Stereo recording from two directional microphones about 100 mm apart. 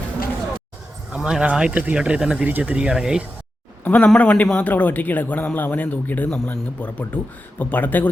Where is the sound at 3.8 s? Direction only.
20° left (ahead or behind).